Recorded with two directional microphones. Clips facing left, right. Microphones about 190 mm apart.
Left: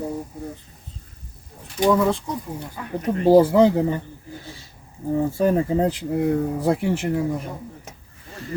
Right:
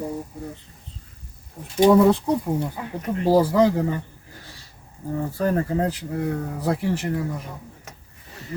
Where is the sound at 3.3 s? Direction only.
25° left (ahead or behind).